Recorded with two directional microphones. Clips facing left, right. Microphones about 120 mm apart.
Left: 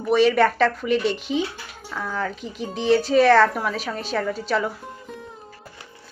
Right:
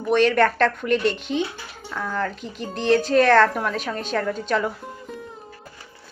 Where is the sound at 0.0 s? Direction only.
5° left (ahead or behind).